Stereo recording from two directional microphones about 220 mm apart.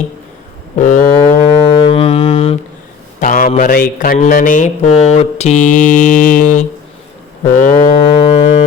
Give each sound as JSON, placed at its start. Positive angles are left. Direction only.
{"t": 0.8, "sound": "speech", "side_deg": 35}
{"t": 1.4, "sound": "music", "side_deg": 20}
{"t": 3.2, "sound": "speech", "side_deg": 35}
{"t": 8.1, "sound": "music", "side_deg": 25}